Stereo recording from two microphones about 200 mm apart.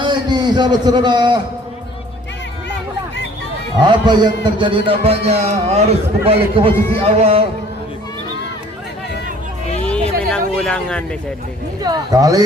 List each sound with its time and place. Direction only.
0.0 s a man's voice: 20° right (ahead or behind)
3.8 s a man's voice: 20° right (ahead or behind)
9.8 s a sound: 5° left (ahead or behind)
11.8 s a man's voice: 20° right (ahead or behind)